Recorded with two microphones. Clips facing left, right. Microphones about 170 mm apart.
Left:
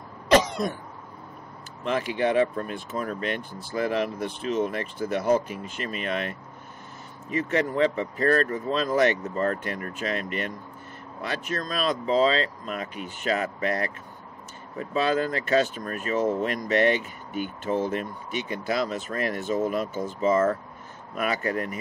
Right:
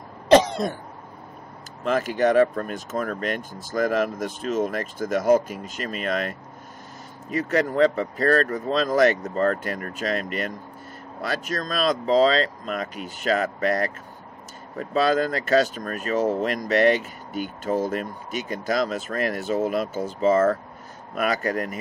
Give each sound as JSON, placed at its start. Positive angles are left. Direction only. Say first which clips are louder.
{"t": 0.3, "sound": "cough", "louder": "right 4 dB", "side_deg": -30}
{"t": 1.9, "sound": "speech", "louder": "right 4 dB", "side_deg": -45}